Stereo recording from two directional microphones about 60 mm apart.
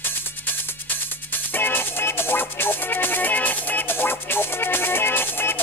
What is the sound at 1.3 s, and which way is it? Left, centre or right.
Music, left.